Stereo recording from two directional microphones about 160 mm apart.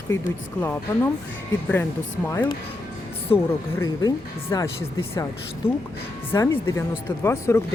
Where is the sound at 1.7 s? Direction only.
15° left (ahead or behind).